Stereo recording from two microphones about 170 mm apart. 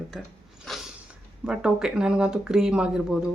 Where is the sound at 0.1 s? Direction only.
Centre (ahead or behind).